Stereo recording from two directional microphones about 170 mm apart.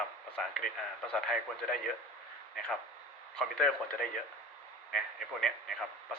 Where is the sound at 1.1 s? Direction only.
5° left (ahead or behind).